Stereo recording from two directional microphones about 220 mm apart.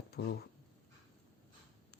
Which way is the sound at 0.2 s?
50° left (ahead or behind).